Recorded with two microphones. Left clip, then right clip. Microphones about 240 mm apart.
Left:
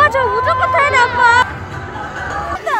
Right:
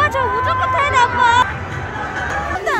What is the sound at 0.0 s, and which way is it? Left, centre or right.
Music, left.